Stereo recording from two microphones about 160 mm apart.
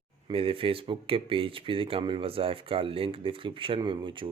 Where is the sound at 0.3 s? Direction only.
35° right (ahead or behind).